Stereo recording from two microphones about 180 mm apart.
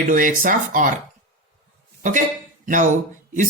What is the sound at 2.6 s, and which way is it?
Speech, 45° right (ahead or behind).